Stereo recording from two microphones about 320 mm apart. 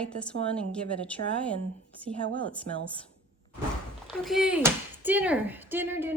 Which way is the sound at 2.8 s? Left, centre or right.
Centre.